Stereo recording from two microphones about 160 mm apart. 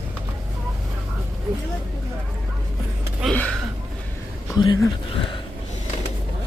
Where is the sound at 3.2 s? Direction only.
5° right (ahead or behind).